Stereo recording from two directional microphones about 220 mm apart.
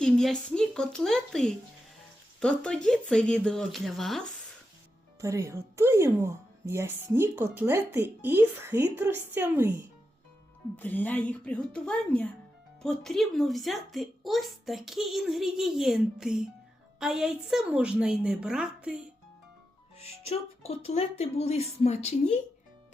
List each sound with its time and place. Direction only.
0.0 s speech: centre (ahead or behind)
5.2 s a woman's voice: 15° right (ahead or behind)
10.8 s speech: 10° left (ahead or behind)
20.0 s speech: 30° left (ahead or behind)